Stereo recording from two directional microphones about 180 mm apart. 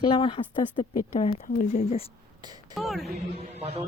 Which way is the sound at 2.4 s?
20° right (ahead or behind).